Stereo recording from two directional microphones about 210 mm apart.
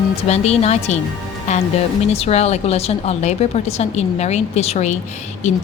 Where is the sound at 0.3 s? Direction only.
30° left (ahead or behind).